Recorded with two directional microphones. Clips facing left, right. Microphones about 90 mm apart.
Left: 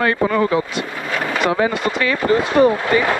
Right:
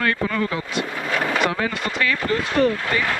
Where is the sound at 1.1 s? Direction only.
20° left (ahead or behind).